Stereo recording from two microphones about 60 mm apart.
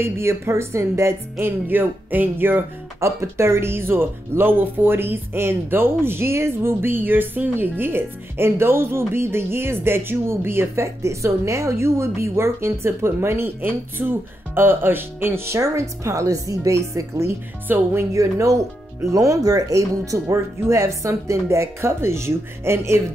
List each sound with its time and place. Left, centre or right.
0.0 s speech: right
1.4 s speech: right
3.0 s speech: right
17.7 s speech: right
18.1 s speech: right